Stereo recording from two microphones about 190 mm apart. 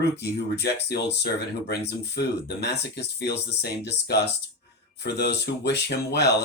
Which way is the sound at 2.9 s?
60° left (ahead or behind).